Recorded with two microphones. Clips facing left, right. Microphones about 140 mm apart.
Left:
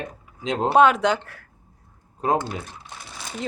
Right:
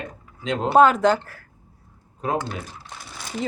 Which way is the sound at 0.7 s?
Centre (ahead or behind).